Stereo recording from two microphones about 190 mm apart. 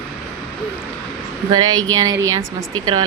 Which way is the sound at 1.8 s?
90° right.